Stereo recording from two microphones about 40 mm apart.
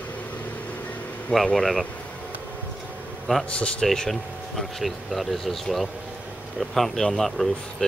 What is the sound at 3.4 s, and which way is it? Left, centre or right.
Speech, left.